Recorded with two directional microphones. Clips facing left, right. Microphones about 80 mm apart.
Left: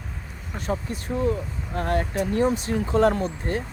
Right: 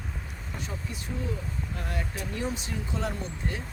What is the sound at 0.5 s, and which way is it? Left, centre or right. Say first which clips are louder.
Speech: left 10 dB; left.